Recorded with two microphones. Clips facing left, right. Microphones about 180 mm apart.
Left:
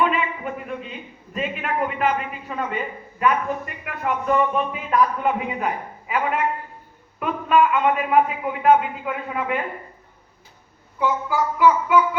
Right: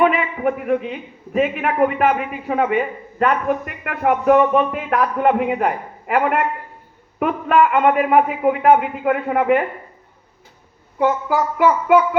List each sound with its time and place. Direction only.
0.0 s a man's voice: 60° right (ahead or behind)
10.9 s a man's voice: 60° right (ahead or behind)